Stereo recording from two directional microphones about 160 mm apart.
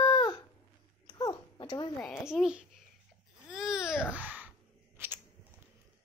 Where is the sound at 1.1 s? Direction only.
20° left (ahead or behind).